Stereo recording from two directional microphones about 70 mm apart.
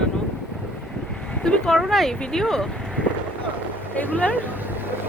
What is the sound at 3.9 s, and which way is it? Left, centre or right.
Speech, left.